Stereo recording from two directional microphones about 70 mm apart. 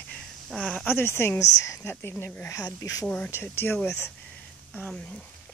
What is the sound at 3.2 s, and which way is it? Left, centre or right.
Speech, left.